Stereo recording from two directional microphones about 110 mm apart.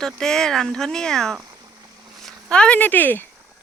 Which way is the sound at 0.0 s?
5° left (ahead or behind).